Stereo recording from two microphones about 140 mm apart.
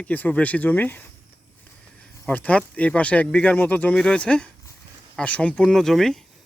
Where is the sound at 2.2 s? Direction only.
10° left (ahead or behind).